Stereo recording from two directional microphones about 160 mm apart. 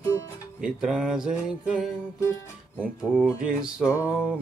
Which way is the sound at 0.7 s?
5° right (ahead or behind).